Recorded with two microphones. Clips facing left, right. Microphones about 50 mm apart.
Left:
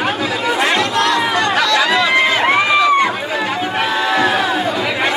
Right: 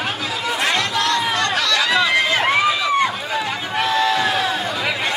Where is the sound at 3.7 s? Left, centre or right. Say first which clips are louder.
Even; centre.